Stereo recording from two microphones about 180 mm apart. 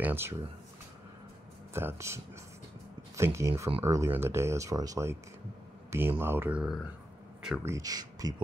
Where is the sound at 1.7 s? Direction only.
15° right (ahead or behind).